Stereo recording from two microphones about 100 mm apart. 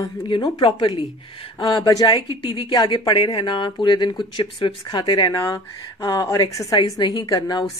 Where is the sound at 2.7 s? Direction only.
45° left (ahead or behind).